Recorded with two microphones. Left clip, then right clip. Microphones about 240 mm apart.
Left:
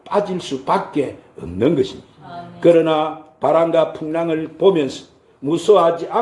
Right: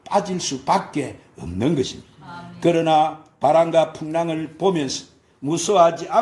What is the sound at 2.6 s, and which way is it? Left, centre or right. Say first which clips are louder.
A man's voice: left 3 dB; right.